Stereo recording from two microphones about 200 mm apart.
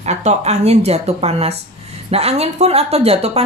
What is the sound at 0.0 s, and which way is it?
A woman's voice, 35° right (ahead or behind).